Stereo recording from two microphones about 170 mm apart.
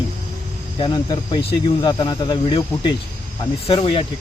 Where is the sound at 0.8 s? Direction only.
25° left (ahead or behind).